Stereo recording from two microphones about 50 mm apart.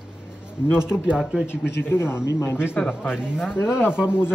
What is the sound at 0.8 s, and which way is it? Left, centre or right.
Speech, centre.